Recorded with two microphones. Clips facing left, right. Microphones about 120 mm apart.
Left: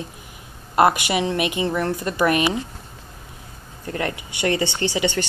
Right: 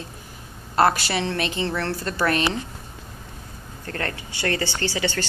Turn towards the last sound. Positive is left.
turn(degrees=20)  # may be behind; listen again after turning